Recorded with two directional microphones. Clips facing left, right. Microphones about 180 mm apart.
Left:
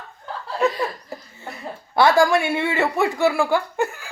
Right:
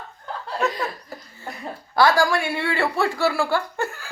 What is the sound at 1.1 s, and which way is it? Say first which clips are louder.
Speech: left 1 dB; 25° left (ahead or behind).